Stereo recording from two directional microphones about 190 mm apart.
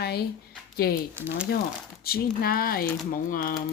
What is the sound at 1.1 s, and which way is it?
Speech, 10° right (ahead or behind).